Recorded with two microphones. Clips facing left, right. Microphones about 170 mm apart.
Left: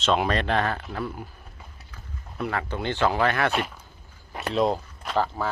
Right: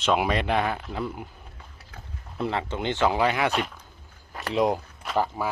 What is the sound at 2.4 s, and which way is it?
Speech, 25° right (ahead or behind).